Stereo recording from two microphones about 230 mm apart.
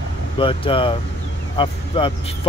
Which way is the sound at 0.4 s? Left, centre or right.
Left.